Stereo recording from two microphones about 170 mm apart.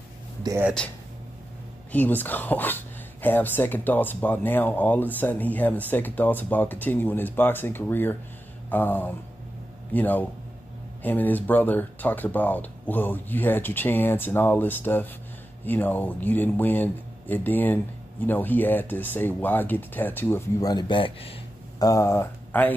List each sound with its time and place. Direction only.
0.4 s speech: 20° right (ahead or behind)
1.9 s speech: 10° left (ahead or behind); by 21.4 s 30° left (ahead or behind)
21.7 s speech: 20° left (ahead or behind)